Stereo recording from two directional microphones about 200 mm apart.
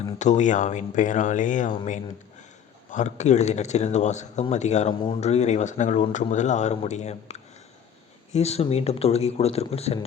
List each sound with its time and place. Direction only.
0.2 s speech: 35° left (ahead or behind)
2.9 s speech: 35° left (ahead or behind)